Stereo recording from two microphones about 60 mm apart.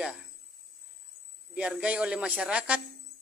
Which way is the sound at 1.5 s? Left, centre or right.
Centre.